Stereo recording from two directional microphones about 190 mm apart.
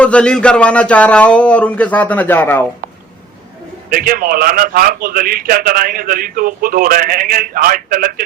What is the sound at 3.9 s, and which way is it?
A man's voice, 50° right (ahead or behind).